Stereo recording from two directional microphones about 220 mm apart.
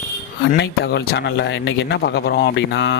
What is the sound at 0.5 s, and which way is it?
Speech, 50° left (ahead or behind).